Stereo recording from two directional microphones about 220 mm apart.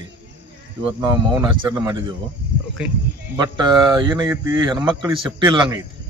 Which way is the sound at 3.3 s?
20° right (ahead or behind).